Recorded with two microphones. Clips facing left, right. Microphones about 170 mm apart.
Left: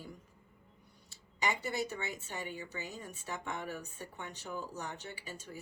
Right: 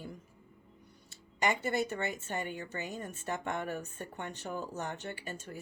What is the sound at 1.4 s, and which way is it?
A woman's voice, 50° right (ahead or behind).